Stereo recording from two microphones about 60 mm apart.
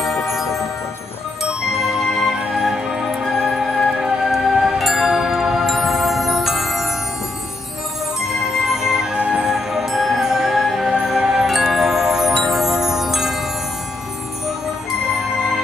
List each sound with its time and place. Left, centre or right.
0.0 s music: centre
8.3 s music: centre
9.5 s music: centre
15.0 s music: centre